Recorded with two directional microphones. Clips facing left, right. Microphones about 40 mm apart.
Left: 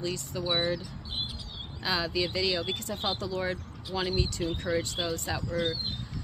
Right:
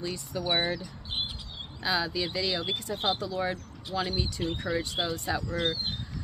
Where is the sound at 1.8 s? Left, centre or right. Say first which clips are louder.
Even; centre.